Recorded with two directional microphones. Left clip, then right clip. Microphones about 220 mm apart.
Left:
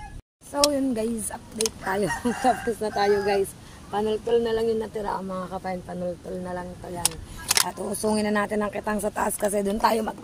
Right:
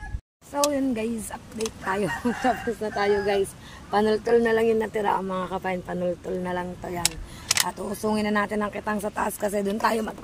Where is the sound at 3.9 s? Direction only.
30° right (ahead or behind).